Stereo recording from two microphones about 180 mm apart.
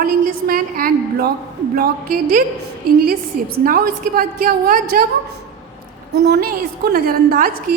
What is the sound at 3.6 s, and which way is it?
A woman's voice, 55° right (ahead or behind).